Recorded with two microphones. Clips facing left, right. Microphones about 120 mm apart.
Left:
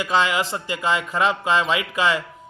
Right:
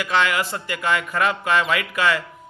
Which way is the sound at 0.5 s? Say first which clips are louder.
Even; 20° left (ahead or behind).